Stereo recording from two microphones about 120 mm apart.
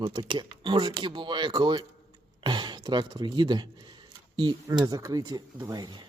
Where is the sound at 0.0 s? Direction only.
45° right (ahead or behind).